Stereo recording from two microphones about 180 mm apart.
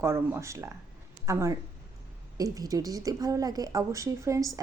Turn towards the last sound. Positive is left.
turn(degrees=-20)  # may be behind; listen again after turning